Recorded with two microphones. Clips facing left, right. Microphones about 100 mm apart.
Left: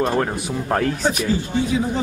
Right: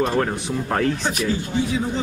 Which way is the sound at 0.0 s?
15° left (ahead or behind).